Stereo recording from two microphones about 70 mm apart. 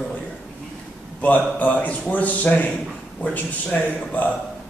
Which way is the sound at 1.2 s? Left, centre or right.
Left.